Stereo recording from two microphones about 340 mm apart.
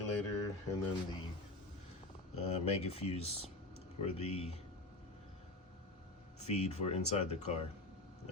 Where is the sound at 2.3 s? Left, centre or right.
Centre.